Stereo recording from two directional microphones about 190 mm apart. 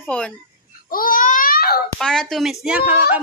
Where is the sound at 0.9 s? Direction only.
50° left (ahead or behind).